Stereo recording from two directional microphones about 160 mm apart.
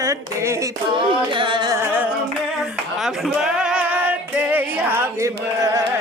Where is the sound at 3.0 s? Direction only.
5° right (ahead or behind); by 5.8 s 20° right (ahead or behind).